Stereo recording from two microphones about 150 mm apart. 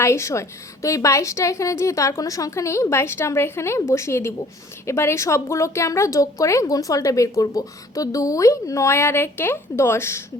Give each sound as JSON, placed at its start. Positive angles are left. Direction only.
{"t": 0.0, "sound": "speech", "side_deg": 20}